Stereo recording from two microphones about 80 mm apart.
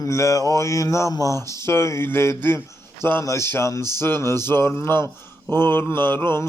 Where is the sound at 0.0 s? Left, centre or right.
Left.